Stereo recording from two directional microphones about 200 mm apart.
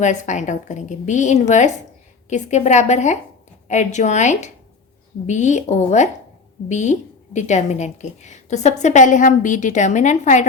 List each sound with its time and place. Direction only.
0.0 s a woman's voice: 35° left (ahead or behind)